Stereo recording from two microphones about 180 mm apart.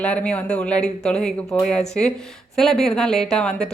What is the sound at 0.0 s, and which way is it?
Speech, 5° left (ahead or behind).